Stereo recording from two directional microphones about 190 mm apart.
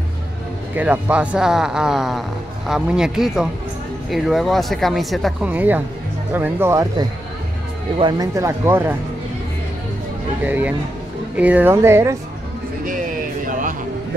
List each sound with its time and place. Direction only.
0.7 s speech: 10° right (ahead or behind)
10.4 s speech: 10° right (ahead or behind)
12.8 s speech: 45° right (ahead or behind)